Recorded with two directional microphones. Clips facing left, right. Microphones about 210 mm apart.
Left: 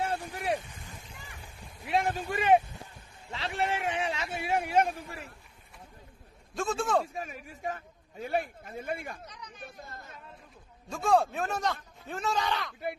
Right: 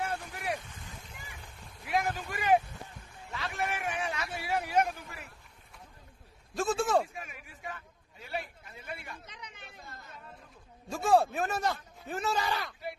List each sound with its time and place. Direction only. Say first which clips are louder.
0.0 s a sound: left 3 dB; 30° left (ahead or behind)
1.9 s a man's voice: left 3 dB; 25° left (ahead or behind)
6.5 s a man's voice: right 1 dB; centre (ahead or behind)
7.2 s a man's voice: left 6 dB; 40° left (ahead or behind)
10.9 s a man's voice: even; 5° right (ahead or behind)